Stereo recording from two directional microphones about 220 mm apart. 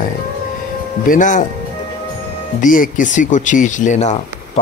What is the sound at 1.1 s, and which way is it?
Speech, 35° left (ahead or behind).